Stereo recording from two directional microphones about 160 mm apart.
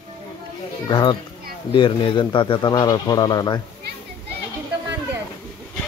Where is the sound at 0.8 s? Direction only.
30° left (ahead or behind).